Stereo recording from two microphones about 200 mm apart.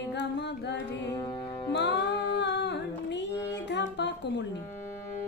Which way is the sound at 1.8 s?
60° left (ahead or behind).